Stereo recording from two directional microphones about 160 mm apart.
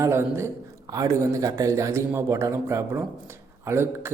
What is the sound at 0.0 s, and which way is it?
A man's voice, 15° right (ahead or behind).